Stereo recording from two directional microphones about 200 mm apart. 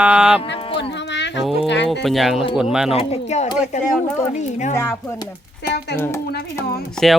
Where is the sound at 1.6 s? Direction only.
60° left (ahead or behind).